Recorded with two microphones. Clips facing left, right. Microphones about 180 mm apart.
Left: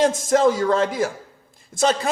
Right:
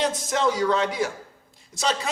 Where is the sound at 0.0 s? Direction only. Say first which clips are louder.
Left 7 dB; 45° left (ahead or behind).